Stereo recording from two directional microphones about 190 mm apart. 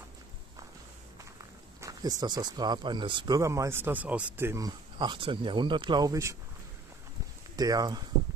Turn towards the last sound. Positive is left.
turn(degrees=-20)  # may be behind; listen again after turning